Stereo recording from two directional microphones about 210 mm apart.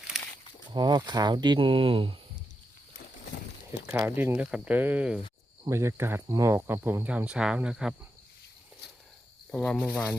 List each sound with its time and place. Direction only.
0.1 s walk: centre (ahead or behind)
0.7 s speech: 20° right (ahead or behind)
3.7 s speech: 15° right (ahead or behind)
9.5 s speech: 5° left (ahead or behind)